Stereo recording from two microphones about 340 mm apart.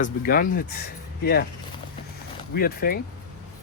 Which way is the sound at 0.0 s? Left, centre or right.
Left.